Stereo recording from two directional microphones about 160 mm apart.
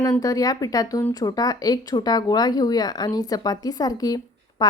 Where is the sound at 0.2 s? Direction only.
20° left (ahead or behind).